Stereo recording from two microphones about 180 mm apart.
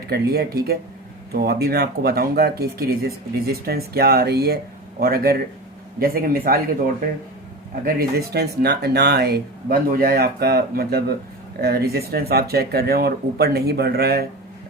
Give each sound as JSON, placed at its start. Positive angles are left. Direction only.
{"t": 0.1, "sound": "speech", "side_deg": -60}